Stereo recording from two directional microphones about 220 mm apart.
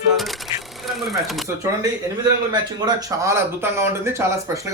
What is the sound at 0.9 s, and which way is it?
Speech, centre (ahead or behind).